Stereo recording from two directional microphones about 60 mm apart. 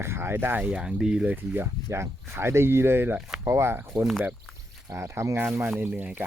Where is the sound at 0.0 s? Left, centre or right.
Right.